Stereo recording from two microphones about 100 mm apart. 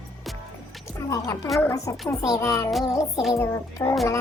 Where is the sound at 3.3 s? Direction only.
30° left (ahead or behind).